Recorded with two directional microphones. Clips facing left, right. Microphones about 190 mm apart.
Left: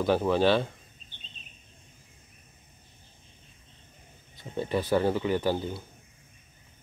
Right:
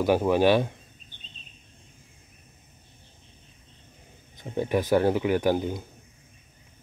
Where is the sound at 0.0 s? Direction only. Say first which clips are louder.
Right 3 dB; 15° right (ahead or behind).